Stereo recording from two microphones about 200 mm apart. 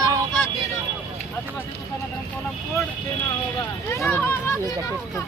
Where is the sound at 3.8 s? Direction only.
10° left (ahead or behind).